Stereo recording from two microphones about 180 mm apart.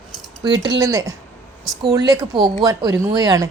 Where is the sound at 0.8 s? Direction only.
20° right (ahead or behind).